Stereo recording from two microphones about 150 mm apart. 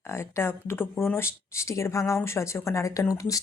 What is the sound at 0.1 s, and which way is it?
Speech, 15° left (ahead or behind).